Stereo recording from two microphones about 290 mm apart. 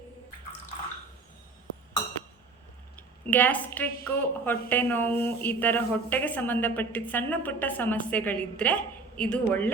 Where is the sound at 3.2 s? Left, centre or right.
Centre.